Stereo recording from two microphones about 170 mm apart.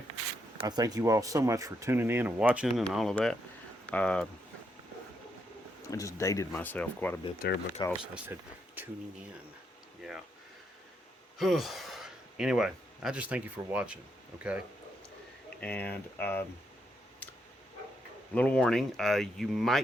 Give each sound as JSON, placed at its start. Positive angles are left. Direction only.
{"t": 0.7, "sound": "speech", "side_deg": -20}
{"t": 5.9, "sound": "speech", "side_deg": 20}
{"t": 7.4, "sound": "speech", "side_deg": 75}
{"t": 8.0, "sound": "speech", "side_deg": -10}
{"t": 10.0, "sound": "speech", "side_deg": 0}
{"t": 11.3, "sound": "speech", "side_deg": 0}
{"t": 15.6, "sound": "speech", "side_deg": 10}
{"t": 18.3, "sound": "speech", "side_deg": 5}